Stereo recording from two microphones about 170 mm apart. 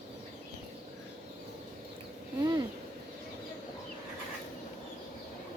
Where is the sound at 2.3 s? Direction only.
25° right (ahead or behind).